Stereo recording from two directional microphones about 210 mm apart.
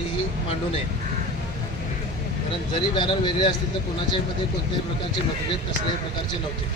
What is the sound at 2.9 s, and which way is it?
Speech, 20° left (ahead or behind).